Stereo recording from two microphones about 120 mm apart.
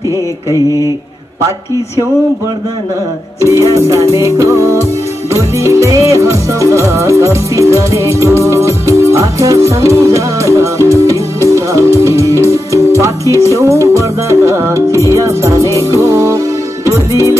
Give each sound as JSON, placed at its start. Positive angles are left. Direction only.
{"t": 3.4, "sound": "music", "side_deg": -25}
{"t": 9.8, "sound": "music", "side_deg": 25}
{"t": 11.0, "sound": "music", "side_deg": -25}